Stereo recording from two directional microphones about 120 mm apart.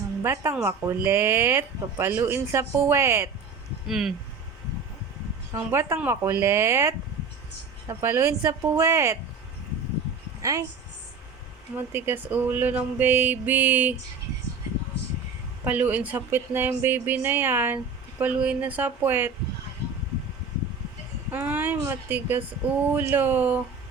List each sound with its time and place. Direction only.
0.2 s speech: 20° right (ahead or behind)
3.8 s speech: 5° right (ahead or behind)
5.5 s speech: 20° right (ahead or behind)
10.4 s speech: 30° right (ahead or behind)
11.8 s speech: 20° right (ahead or behind)
15.6 s speech: 15° right (ahead or behind)
21.3 s speech: 15° right (ahead or behind)